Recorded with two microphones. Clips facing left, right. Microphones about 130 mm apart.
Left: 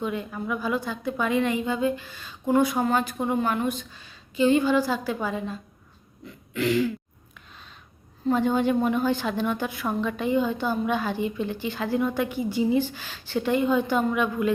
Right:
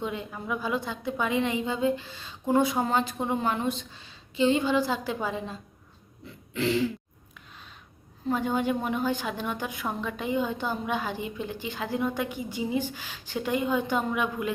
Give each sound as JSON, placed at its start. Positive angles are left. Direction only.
{"t": 0.0, "sound": "speech", "side_deg": -20}
{"t": 6.5, "sound": "throat clearing", "side_deg": -30}
{"t": 8.3, "sound": "a woman's voice", "side_deg": -10}